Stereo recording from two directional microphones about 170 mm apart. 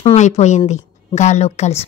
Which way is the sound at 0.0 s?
40° left (ahead or behind).